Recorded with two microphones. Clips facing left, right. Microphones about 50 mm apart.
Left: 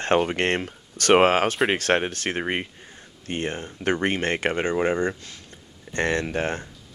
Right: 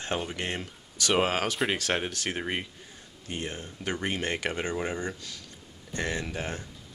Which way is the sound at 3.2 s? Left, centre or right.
Left.